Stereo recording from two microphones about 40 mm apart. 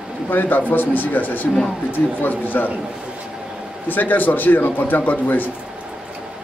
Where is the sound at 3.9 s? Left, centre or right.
Left.